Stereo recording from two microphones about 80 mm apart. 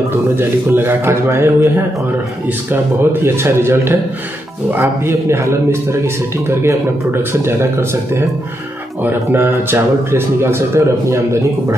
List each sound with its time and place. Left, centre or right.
0.4 s a man's voice: right